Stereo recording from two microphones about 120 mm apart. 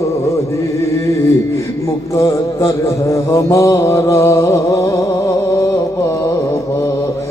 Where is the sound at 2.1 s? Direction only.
30° left (ahead or behind).